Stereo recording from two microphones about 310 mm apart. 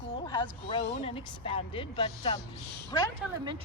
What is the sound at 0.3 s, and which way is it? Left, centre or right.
Speech, centre.